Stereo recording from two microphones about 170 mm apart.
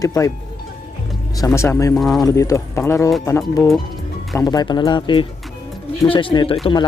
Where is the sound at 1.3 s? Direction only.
20° left (ahead or behind).